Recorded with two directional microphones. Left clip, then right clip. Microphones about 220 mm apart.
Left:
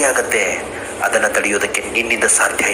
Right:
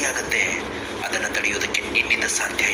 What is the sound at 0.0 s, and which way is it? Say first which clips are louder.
A man's voice: left 7 dB; 40° left (ahead or behind).